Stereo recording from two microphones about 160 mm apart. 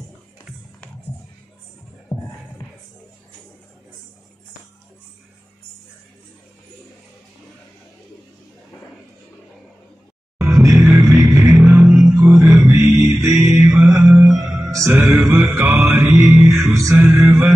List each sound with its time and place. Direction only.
2.1 s music: 15° left (ahead or behind)
10.4 s music: 20° right (ahead or behind)
13.3 s music: centre (ahead or behind)
13.8 s music: 20° right (ahead or behind)